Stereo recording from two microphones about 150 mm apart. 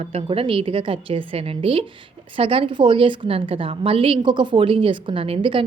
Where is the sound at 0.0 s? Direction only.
40° right (ahead or behind).